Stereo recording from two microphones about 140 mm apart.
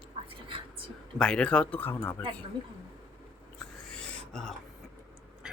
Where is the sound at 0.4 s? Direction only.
40° right (ahead or behind).